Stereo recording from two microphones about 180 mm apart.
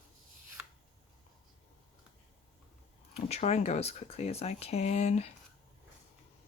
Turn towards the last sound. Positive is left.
turn(degrees=40)  # may be behind; listen again after turning